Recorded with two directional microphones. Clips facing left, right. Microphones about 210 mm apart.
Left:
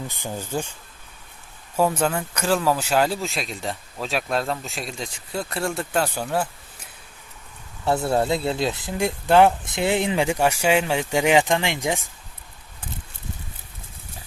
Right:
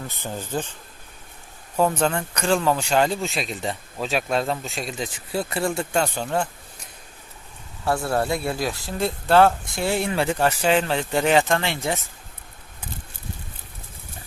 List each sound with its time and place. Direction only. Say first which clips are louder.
0.1 s speech: even; 15° left (ahead or behind)
1.7 s speech: even; 5° left (ahead or behind)
7.9 s speech: left 2 dB; 20° left (ahead or behind)